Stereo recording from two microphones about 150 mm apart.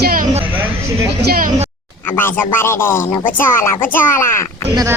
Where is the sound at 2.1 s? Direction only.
15° left (ahead or behind).